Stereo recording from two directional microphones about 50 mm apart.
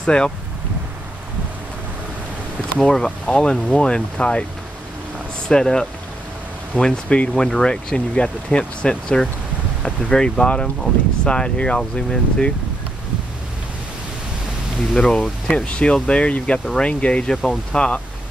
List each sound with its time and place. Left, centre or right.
0.0 s speech: centre
2.8 s speech: centre
5.5 s speech: centre
15.0 s speech: centre